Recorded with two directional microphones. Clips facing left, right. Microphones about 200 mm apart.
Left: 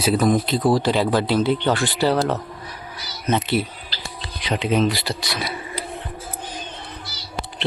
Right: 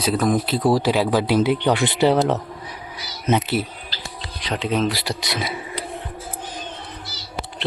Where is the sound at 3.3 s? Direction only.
5° right (ahead or behind).